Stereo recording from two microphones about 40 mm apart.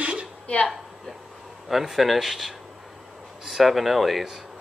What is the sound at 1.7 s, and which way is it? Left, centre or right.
Speech, centre.